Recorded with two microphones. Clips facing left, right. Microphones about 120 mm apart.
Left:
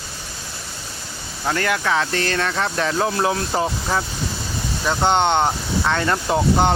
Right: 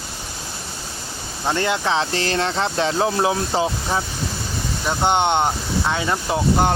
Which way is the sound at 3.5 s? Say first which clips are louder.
Right 1 dB; centre (ahead or behind).